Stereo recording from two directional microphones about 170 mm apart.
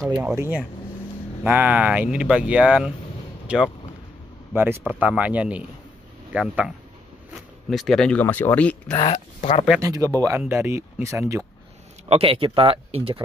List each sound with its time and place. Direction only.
0.1 s speech: 10° right (ahead or behind)
7.7 s speech: centre (ahead or behind)
8.9 s speech: 30° left (ahead or behind)
9.8 s speech: 20° right (ahead or behind)
12.1 s speech: 35° right (ahead or behind)